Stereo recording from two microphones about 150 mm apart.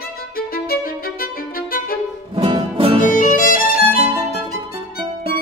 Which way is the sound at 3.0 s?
60° left (ahead or behind).